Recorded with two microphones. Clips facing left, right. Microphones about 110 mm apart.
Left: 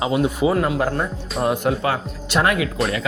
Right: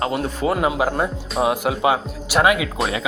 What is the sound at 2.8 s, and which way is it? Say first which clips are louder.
Speech: left 1 dB; centre (ahead or behind).